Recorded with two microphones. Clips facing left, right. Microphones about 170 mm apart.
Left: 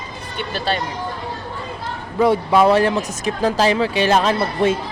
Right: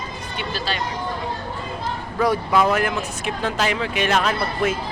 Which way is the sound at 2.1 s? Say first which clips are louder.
Left 4 dB; 25° left (ahead or behind).